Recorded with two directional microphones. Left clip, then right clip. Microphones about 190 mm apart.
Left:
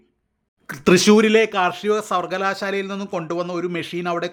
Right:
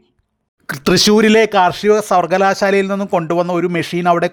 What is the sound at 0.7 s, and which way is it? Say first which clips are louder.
Speech: right 2 dB; 30° right (ahead or behind).